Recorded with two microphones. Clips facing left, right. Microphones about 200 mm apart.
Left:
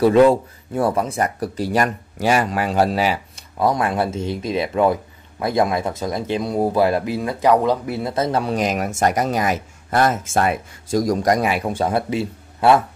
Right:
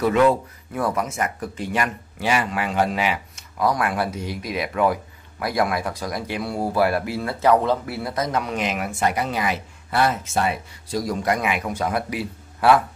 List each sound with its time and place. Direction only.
0.0 s speech: 30° left (ahead or behind)